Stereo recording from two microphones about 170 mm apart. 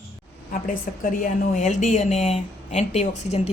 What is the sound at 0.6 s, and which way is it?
A woman's voice, 50° left (ahead or behind).